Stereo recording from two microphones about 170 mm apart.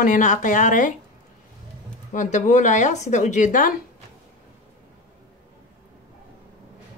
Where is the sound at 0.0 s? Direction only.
50° left (ahead or behind).